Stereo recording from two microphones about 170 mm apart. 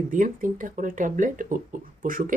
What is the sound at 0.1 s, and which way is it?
Speech, 50° right (ahead or behind).